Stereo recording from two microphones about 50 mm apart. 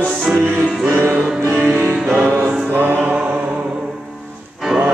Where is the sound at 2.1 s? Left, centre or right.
Right.